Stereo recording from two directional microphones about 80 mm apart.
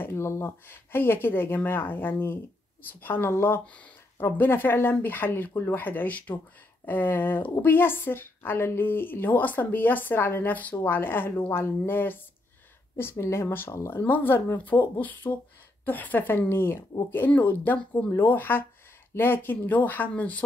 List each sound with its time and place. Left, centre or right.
0.0 s a woman's voice: left
13.2 s a woman's voice: left